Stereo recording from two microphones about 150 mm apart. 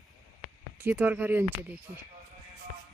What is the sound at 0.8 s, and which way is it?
Speech, 10° right (ahead or behind).